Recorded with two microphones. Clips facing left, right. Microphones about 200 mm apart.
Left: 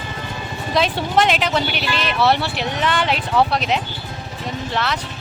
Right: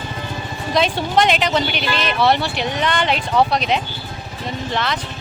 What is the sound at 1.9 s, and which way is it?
Speech, 35° right (ahead or behind).